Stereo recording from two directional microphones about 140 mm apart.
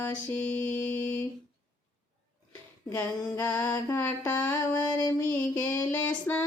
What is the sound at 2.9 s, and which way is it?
Music, 15° left (ahead or behind).